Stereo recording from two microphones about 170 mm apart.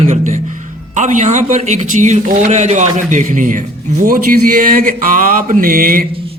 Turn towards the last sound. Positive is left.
turn(degrees=-55)  # may be behind; listen again after turning